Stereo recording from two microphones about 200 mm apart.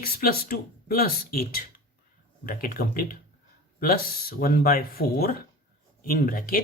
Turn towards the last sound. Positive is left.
turn(degrees=45)  # may be behind; listen again after turning